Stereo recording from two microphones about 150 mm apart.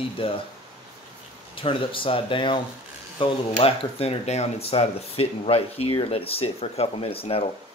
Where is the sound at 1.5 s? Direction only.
35° left (ahead or behind).